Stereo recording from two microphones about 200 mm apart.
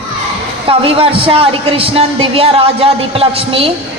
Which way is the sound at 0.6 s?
25° right (ahead or behind).